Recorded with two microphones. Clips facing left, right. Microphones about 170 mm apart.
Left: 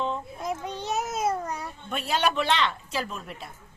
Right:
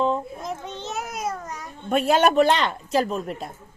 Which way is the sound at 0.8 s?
15° left (ahead or behind).